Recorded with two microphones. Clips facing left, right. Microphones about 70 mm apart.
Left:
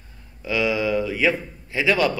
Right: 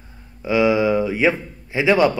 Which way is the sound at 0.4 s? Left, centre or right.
Right.